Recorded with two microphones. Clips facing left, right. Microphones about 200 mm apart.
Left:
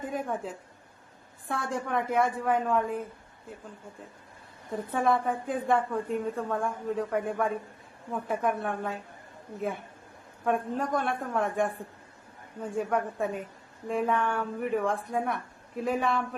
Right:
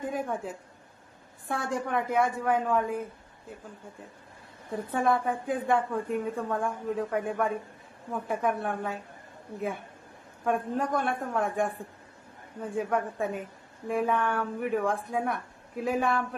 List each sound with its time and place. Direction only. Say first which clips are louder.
0.0 s a woman's voice: right 1 dB; centre (ahead or behind)
4.7 s a woman's voice: even; centre (ahead or behind)